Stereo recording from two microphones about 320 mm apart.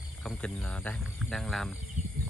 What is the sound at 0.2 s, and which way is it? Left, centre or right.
Speech, centre.